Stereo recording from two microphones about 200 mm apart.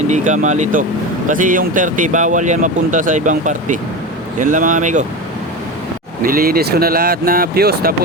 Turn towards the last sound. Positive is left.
turn(degrees=-50)  # may be behind; listen again after turning